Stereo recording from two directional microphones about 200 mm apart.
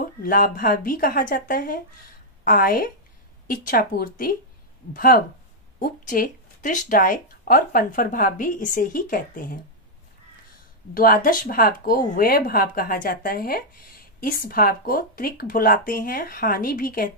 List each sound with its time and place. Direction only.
0.0 s speech: 45° left (ahead or behind)
11.0 s speech: 45° left (ahead or behind)